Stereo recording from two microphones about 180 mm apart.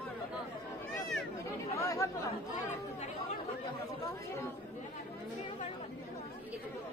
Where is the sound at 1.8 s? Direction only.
15° left (ahead or behind).